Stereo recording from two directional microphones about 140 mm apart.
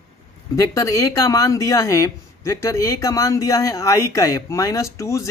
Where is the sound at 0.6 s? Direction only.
25° left (ahead or behind).